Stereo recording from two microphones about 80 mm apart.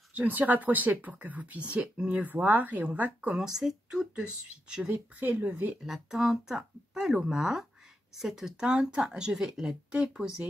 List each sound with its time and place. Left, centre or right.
0.1 s speech: right
3.4 s speech: centre
5.2 s speech: right
5.9 s speech: centre